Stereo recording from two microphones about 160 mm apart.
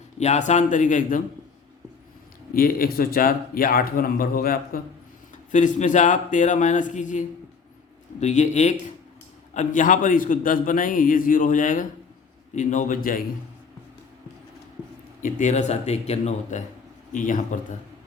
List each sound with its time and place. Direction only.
0.2 s speech: 45° left (ahead or behind)
2.5 s a man's voice: 65° left (ahead or behind)
5.5 s a man's voice: 50° left (ahead or behind)
15.2 s speech: 50° left (ahead or behind)